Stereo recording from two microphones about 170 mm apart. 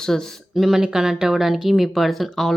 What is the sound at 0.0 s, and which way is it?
Speech, 5° left (ahead or behind).